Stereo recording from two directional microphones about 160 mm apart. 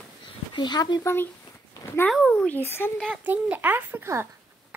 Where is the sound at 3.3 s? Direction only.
10° right (ahead or behind).